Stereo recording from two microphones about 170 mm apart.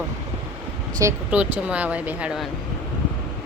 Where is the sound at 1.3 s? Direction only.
5° right (ahead or behind).